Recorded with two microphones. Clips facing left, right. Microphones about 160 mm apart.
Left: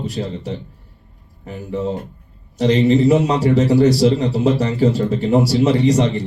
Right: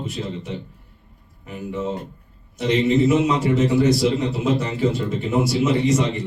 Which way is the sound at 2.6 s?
35° left (ahead or behind).